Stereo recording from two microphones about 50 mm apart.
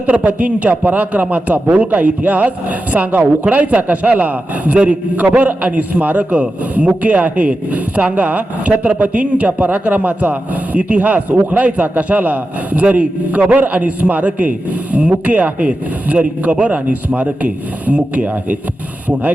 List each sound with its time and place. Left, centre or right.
0.0 s a man's voice: right